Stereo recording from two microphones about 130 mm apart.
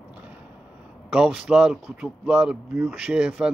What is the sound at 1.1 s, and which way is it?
Speech, 5° right (ahead or behind).